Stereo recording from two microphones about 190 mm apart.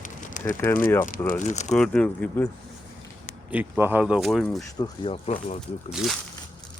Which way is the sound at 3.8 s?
10° right (ahead or behind).